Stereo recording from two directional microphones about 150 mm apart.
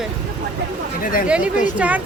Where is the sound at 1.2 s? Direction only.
10° right (ahead or behind).